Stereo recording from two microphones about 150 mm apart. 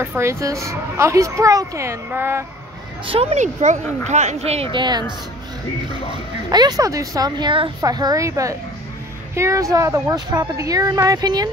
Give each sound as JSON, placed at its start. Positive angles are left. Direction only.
{"t": 0.0, "sound": "speech", "side_deg": -15}
{"t": 3.1, "sound": "speech", "side_deg": -45}
{"t": 4.7, "sound": "speech", "side_deg": -30}
{"t": 6.5, "sound": "speech", "side_deg": -25}